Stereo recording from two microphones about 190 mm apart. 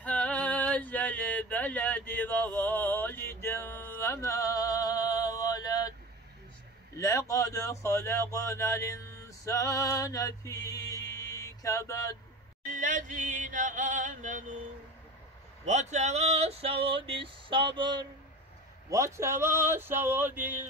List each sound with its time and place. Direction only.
0.0 s a sound: 10° left (ahead or behind)
7.0 s speech: 15° left (ahead or behind)
12.7 s chant: 40° right (ahead or behind)
15.6 s speech: 35° right (ahead or behind); by 20.6 s 10° right (ahead or behind)